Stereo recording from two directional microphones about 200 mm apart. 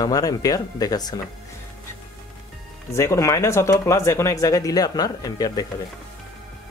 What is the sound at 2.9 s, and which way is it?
Speech, 15° left (ahead or behind).